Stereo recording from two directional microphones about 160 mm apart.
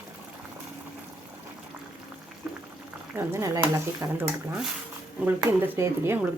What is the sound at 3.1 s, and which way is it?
Speech, 15° right (ahead or behind).